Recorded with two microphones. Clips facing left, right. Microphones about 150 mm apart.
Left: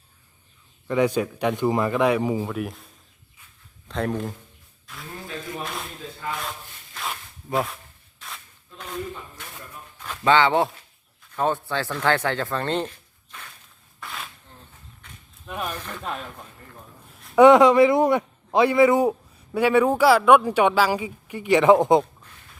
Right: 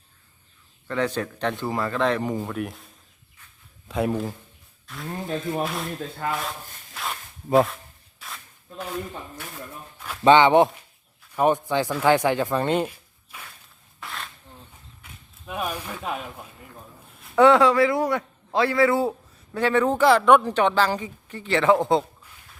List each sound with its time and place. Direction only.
0.9 s a woman's voice: 10° left (ahead or behind)
5.5 s speech: 30° right (ahead or behind)
6.2 s speech: 60° right (ahead or behind)
6.9 s zipper: centre (ahead or behind)
8.2 s a sound: 5° right (ahead or behind)
10.2 s speech: 20° right (ahead or behind)
14.0 s a sound: centre (ahead or behind)
15.0 s speech: 10° right (ahead or behind)
17.3 s a woman's voice: 15° left (ahead or behind)